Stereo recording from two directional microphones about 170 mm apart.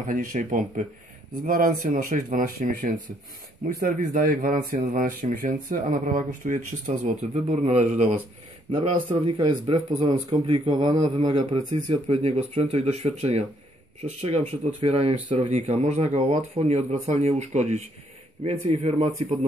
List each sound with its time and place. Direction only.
0.0 s speech: 55° right (ahead or behind)
9.1 s speech: 30° right (ahead or behind)